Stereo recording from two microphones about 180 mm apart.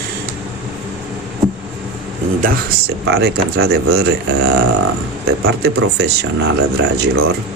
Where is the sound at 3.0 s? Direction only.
65° right (ahead or behind).